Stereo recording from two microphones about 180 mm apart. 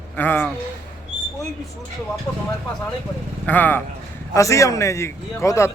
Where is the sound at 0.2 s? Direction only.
10° left (ahead or behind).